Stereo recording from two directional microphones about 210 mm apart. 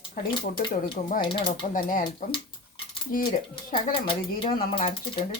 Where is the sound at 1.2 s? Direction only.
25° left (ahead or behind).